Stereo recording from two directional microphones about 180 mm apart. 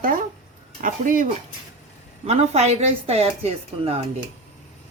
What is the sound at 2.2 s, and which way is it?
A woman's voice, 35° right (ahead or behind).